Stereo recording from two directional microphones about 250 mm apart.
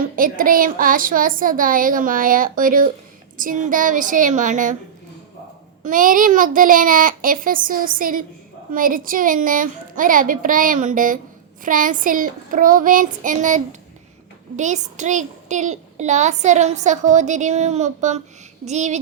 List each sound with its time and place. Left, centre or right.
0.2 s a woman's voice: right
5.8 s a woman's voice: right